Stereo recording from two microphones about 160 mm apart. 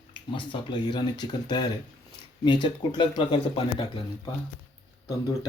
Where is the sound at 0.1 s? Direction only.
30° left (ahead or behind).